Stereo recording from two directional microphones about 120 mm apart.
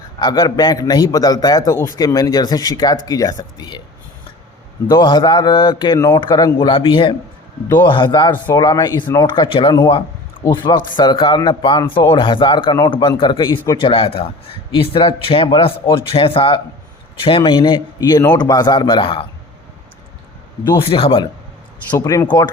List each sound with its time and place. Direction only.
0.2 s speech: 35° left (ahead or behind)
4.9 s speech: 40° left (ahead or behind)
20.7 s speech: 50° left (ahead or behind)
22.0 s speech: 30° left (ahead or behind)